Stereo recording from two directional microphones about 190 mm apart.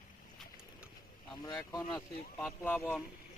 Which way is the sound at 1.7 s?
20° left (ahead or behind).